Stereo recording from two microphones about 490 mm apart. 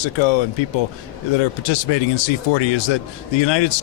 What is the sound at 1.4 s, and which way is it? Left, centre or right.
Speech, left.